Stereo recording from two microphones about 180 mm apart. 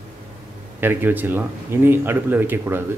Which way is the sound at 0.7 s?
10° right (ahead or behind).